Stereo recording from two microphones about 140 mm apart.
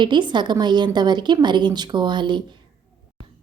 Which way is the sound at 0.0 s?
35° right (ahead or behind).